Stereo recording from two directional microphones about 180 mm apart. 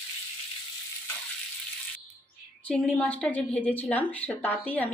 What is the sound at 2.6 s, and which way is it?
A woman's voice, 5° left (ahead or behind).